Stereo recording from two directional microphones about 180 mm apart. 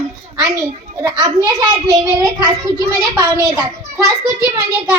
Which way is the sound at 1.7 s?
20° right (ahead or behind).